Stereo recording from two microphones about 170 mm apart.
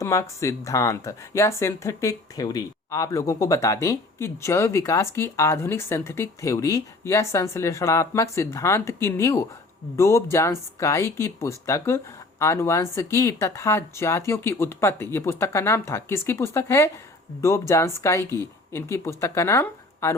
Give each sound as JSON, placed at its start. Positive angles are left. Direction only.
{"t": 0.0, "sound": "speech", "side_deg": 15}